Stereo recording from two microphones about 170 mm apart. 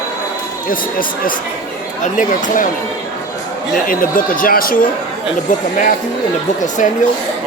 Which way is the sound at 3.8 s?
55° left (ahead or behind).